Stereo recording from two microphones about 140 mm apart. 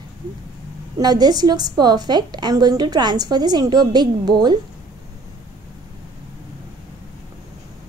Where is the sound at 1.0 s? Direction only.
30° right (ahead or behind).